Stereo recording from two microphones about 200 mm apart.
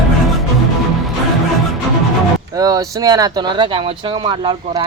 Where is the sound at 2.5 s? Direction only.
20° right (ahead or behind).